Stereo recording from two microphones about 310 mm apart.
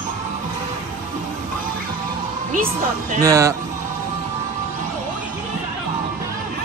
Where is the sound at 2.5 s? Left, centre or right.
Right.